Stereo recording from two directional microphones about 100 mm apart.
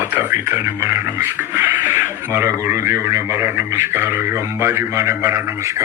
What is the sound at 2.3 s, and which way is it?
Speech, 25° right (ahead or behind).